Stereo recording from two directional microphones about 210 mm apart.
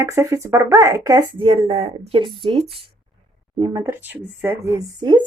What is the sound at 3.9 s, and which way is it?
Speech, 10° right (ahead or behind).